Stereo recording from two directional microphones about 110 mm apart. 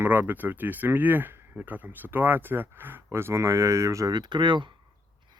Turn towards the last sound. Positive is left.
turn(degrees=-45)  # may be behind; listen again after turning